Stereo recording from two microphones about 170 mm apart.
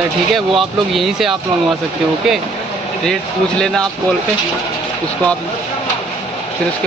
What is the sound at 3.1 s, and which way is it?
Speech, 5° left (ahead or behind).